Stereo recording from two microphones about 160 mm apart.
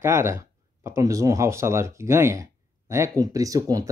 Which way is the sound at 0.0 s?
15° right (ahead or behind).